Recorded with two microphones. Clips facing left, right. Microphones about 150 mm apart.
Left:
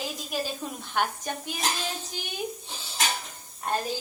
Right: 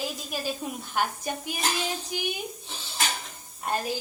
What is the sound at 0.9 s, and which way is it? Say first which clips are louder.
Speech: even; 10° right (ahead or behind).